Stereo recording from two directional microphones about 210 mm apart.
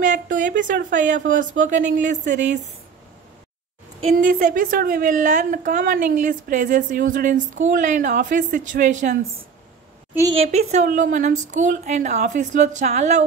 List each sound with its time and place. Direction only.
0.0 s a woman's voice: 35° right (ahead or behind)
4.1 s a woman's voice: 40° right (ahead or behind)
10.3 s a woman's voice: 30° right (ahead or behind)